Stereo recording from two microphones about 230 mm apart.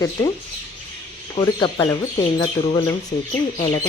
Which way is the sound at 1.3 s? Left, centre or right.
Centre.